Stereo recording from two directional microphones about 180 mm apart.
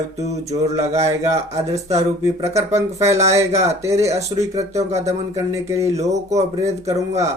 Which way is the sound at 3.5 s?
35° right (ahead or behind).